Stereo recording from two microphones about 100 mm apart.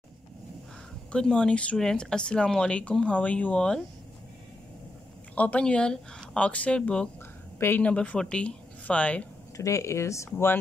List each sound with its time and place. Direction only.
1.1 s speech: 10° left (ahead or behind)
5.3 s speech: 15° left (ahead or behind)
7.5 s speech: 25° left (ahead or behind)
7.8 s speech: 10° left (ahead or behind)
9.6 s speech: 30° left (ahead or behind)